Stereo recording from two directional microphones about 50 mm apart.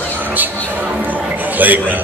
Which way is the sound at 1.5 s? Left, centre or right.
Right.